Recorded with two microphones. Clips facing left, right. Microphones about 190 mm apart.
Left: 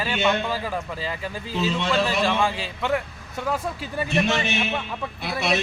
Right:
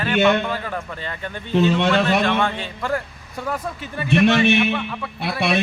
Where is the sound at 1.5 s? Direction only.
65° right (ahead or behind).